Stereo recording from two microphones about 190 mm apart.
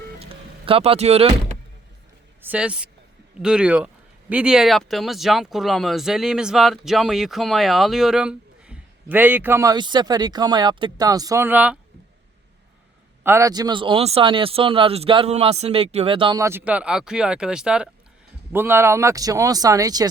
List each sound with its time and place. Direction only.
0.2 s music: 30° right (ahead or behind)
2.4 s speech: 5° right (ahead or behind)
13.2 s speech: 15° right (ahead or behind)